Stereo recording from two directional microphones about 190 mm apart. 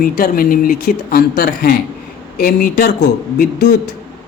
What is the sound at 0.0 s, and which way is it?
A woman's voice, 50° left (ahead or behind).